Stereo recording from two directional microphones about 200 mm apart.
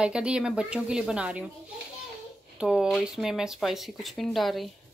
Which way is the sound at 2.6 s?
5° right (ahead or behind).